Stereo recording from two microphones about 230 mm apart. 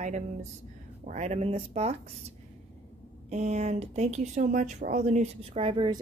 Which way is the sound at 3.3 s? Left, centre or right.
Right.